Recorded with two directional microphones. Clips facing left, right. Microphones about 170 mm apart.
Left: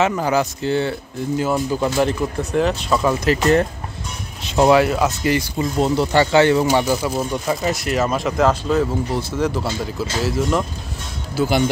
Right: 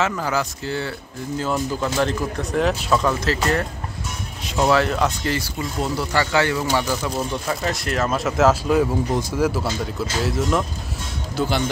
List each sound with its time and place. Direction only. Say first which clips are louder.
0.0 s speech: left 5 dB; 20° left (ahead or behind); by 3.1 s centre (ahead or behind)
3.1 s speech: left 5 dB; 15° left (ahead or behind)
4.5 s speech: left 5 dB; 25° left (ahead or behind)
4.7 s speech: left 3 dB; 10° left (ahead or behind)
5.6 s speech: left 6 dB; 25° left (ahead or behind)
7.0 s speech: left 3 dB; 10° left (ahead or behind)